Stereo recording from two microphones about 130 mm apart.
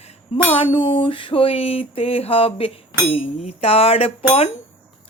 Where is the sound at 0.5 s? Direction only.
40° left (ahead or behind).